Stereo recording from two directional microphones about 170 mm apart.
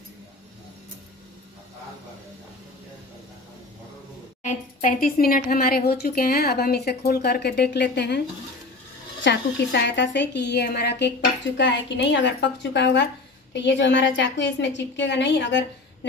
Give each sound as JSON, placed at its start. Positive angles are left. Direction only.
{"t": 4.4, "sound": "speech", "side_deg": 50}
{"t": 9.2, "sound": "a woman's voice", "side_deg": 85}